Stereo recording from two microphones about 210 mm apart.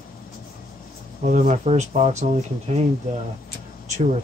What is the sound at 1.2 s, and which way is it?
Speech, 35° right (ahead or behind).